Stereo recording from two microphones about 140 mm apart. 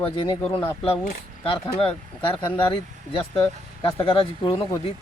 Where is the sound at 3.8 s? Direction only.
40° left (ahead or behind).